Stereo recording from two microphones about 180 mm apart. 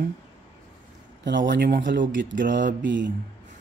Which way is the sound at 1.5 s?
65° right (ahead or behind).